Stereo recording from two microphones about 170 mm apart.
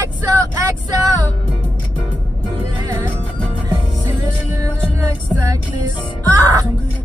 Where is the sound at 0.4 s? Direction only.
20° right (ahead or behind).